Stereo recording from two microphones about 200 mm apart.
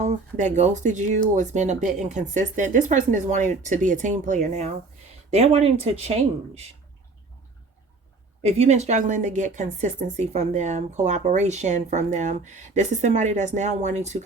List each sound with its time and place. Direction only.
0.0 s a woman's voice: 40° right (ahead or behind)
8.4 s a woman's voice: 30° right (ahead or behind)